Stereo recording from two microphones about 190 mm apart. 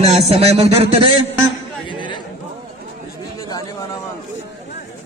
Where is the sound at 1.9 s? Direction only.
25° left (ahead or behind).